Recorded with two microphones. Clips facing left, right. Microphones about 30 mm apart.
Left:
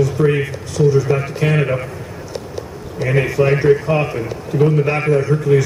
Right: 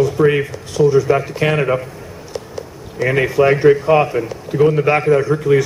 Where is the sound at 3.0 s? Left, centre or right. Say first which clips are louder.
Right 2 dB; right.